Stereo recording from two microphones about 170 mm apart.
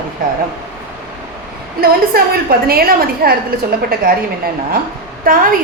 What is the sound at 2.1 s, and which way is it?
A woman's voice, 60° right (ahead or behind).